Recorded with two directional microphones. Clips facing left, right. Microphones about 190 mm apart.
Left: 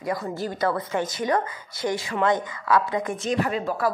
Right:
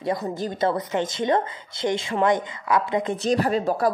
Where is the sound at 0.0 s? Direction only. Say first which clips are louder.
Right 2 dB; 20° right (ahead or behind).